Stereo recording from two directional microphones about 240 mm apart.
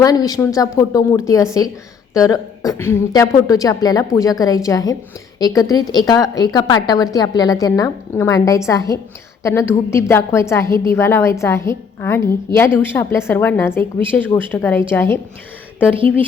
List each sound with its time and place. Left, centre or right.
0.0 s a woman's voice: centre